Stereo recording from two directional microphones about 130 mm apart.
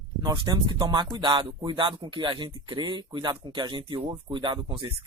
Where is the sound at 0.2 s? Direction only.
30° right (ahead or behind).